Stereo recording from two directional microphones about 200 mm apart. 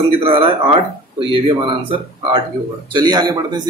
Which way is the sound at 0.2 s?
25° right (ahead or behind).